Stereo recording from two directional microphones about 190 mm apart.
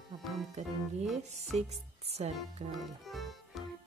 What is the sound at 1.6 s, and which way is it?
Speech, 35° right (ahead or behind).